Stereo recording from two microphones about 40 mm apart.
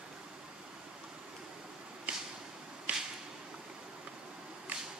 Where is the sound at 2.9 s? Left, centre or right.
Right.